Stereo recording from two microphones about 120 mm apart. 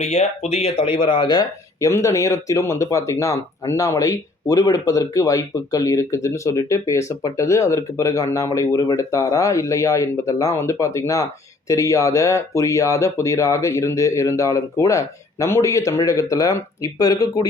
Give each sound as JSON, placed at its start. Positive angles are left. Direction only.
{"t": 0.0, "sound": "speech", "side_deg": 70}
{"t": 1.9, "sound": "speech", "side_deg": 25}